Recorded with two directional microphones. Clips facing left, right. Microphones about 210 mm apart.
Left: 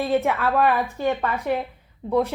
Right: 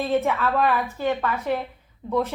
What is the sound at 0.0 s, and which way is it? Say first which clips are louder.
A woman's voice: left 1 dB; 15° left (ahead or behind).